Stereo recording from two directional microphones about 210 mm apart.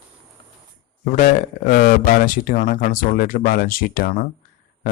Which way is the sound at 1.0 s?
40° left (ahead or behind).